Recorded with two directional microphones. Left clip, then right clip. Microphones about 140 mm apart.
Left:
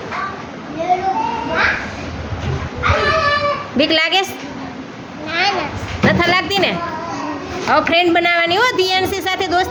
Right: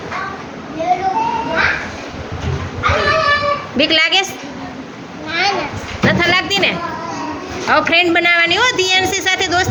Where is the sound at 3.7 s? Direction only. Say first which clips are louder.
Right 2 dB; 25° left (ahead or behind).